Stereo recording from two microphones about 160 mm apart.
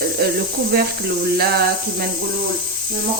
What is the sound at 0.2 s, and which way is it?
Speech, 85° right.